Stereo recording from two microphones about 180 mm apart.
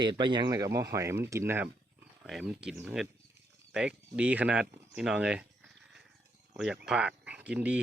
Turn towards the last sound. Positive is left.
turn(degrees=-5)  # may be behind; listen again after turning